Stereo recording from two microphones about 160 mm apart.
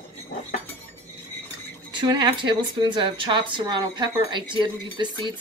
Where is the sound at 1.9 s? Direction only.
30° right (ahead or behind).